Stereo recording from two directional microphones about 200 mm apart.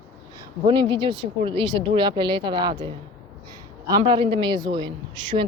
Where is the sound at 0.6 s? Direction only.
20° right (ahead or behind).